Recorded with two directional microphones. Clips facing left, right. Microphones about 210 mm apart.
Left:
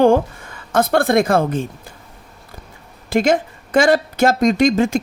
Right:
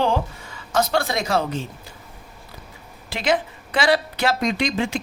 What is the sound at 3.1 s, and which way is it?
Speech, 45° left (ahead or behind).